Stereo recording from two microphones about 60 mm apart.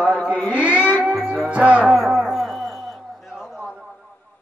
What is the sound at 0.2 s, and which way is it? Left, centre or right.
Mantra, left.